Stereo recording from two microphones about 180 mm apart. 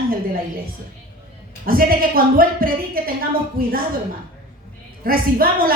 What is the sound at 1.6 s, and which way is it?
A woman's voice, 55° right (ahead or behind).